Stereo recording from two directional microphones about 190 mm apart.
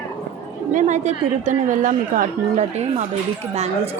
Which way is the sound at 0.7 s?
40° right (ahead or behind).